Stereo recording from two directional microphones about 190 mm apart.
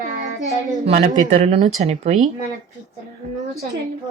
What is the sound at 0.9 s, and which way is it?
Speech, 35° right (ahead or behind).